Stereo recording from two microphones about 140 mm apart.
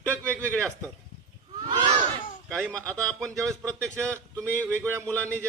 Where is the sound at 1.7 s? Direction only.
30° right (ahead or behind).